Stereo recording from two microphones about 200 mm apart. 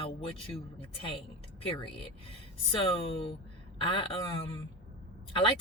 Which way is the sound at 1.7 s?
25° left (ahead or behind).